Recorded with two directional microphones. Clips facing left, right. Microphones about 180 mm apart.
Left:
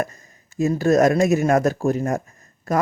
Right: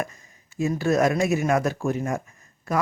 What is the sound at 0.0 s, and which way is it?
Speech, 40° left (ahead or behind).